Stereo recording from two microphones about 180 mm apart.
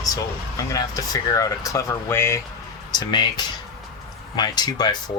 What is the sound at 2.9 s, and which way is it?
Speech, 25° left (ahead or behind).